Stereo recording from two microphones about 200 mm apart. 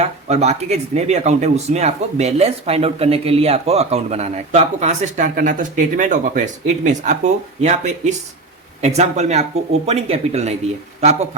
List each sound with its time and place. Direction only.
0.0 s speech: 35° right (ahead or behind)